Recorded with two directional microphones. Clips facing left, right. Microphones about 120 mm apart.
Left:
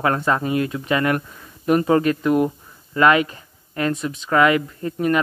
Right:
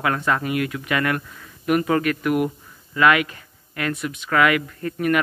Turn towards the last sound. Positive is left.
turn(degrees=25)  # may be behind; listen again after turning